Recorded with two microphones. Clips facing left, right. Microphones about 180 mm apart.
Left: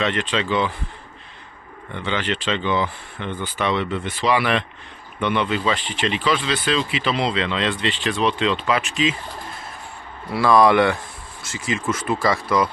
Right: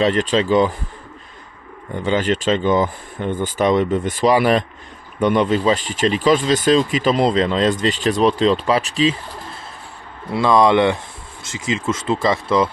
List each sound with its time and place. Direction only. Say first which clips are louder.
0.0 s speech: right 6 dB; 40° right (ahead or behind)
1.9 s speech: right 6 dB; 40° right (ahead or behind)
10.3 s speech: right 1 dB; 20° right (ahead or behind)